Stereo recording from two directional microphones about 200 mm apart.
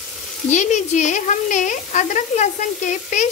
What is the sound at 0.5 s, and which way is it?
Speech, 35° left (ahead or behind).